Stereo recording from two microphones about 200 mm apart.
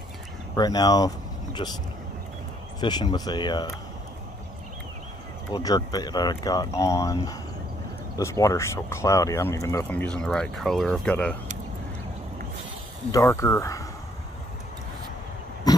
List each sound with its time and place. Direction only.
0.6 s speech: 20° left (ahead or behind)
2.8 s speech: 20° left (ahead or behind)
5.5 s speech: 20° left (ahead or behind)
13.1 s speech: 15° left (ahead or behind)